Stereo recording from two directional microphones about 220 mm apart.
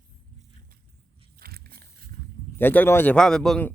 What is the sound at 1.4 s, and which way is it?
Vehicle, 45° right (ahead or behind).